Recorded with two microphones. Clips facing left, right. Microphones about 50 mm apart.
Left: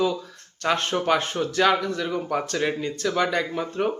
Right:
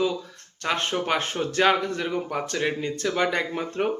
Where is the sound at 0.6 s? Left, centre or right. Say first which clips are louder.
Left 3 dB; right.